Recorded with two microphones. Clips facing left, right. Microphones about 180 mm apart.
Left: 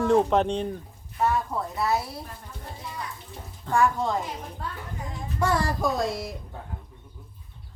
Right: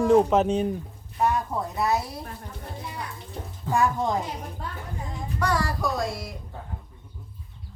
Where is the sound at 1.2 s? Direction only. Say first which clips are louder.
Right 1 dB; 20° right (ahead or behind).